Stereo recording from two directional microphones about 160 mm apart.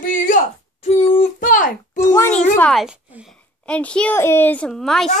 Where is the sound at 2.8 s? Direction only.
5° right (ahead or behind).